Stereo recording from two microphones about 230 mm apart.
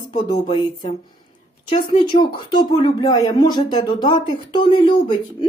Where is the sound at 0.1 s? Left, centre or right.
Centre.